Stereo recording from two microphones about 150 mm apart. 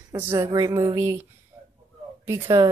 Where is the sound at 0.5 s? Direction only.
30° right (ahead or behind).